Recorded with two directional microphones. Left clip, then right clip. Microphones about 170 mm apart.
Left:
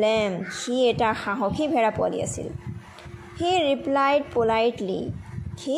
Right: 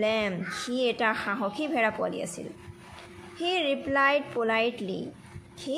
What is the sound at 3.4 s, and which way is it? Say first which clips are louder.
A child's voice: left 5 dB; 15° left (ahead or behind).